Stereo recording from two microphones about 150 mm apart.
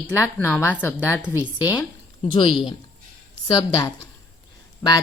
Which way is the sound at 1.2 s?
10° right (ahead or behind).